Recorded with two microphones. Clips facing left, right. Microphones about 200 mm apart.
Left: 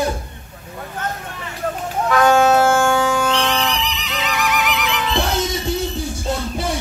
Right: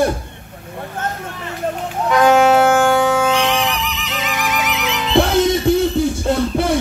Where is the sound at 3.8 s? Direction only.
50° right (ahead or behind).